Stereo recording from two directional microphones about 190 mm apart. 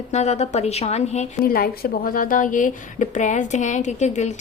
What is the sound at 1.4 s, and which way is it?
A woman's voice, 50° left (ahead or behind).